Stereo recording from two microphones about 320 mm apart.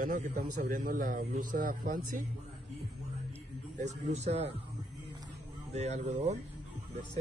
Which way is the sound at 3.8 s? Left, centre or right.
Right.